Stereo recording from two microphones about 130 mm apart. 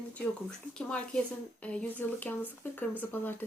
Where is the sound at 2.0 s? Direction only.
15° left (ahead or behind).